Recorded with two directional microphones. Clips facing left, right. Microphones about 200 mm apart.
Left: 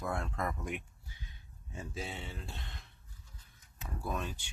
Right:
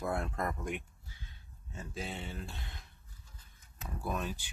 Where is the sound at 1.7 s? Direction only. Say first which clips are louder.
Even; centre (ahead or behind).